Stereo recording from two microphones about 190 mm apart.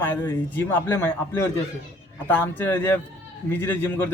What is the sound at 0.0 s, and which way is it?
A man's voice, 10° left (ahead or behind).